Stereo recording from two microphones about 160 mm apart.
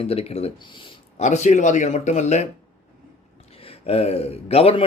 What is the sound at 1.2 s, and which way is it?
Speech, 45° left (ahead or behind).